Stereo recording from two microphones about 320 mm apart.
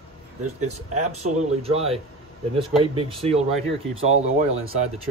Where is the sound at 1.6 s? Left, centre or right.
Centre.